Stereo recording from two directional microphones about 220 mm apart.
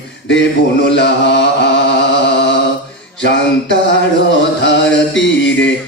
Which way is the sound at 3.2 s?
55° left (ahead or behind).